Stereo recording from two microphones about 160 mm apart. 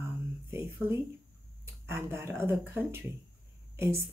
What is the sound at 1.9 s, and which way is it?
Speech, 15° right (ahead or behind).